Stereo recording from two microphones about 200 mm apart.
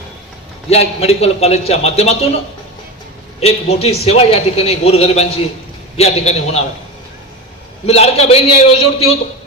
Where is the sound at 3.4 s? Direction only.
30° left (ahead or behind).